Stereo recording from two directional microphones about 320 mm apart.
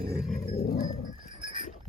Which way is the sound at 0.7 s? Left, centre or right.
Left.